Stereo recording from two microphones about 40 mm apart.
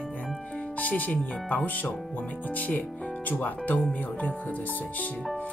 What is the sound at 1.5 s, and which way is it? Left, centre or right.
Speech, left.